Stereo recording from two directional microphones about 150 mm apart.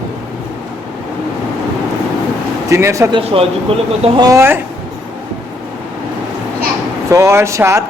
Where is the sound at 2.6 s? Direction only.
20° right (ahead or behind).